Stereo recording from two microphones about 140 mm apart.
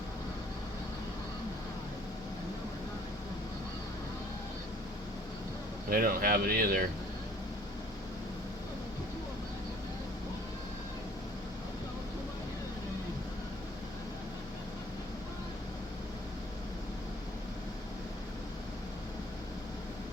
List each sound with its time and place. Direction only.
5.9 s speech: 90° right